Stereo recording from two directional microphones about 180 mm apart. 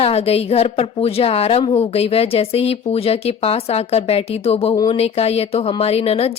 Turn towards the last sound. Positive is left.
turn(degrees=35)  # may be behind; listen again after turning